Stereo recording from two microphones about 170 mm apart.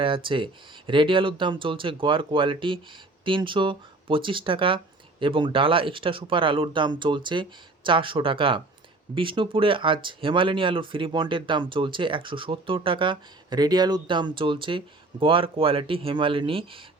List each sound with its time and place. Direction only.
0.0 s speech: 30° right (ahead or behind)